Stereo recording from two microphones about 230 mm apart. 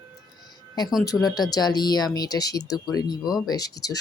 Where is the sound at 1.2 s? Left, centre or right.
Centre.